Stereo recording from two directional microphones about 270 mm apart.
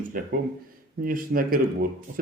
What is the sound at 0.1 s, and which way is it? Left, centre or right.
Speech, right.